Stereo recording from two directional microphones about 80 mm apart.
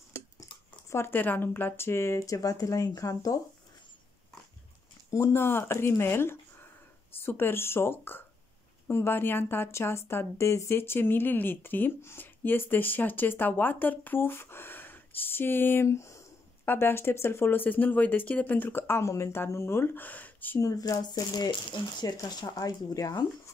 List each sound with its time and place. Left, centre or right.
0.8 s speech: left
5.1 s speech: left
20.6 s speech: left
22.1 s speech: left